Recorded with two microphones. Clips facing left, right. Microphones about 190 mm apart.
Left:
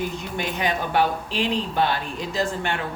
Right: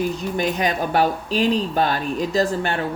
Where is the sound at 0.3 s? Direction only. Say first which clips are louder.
Right 3 dB; 40° right (ahead or behind).